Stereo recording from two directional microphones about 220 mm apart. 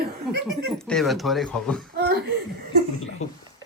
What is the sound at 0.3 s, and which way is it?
Speech, centre (ahead or behind).